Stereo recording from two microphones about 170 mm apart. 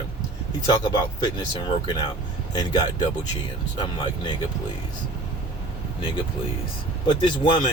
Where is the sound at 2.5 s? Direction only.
25° left (ahead or behind).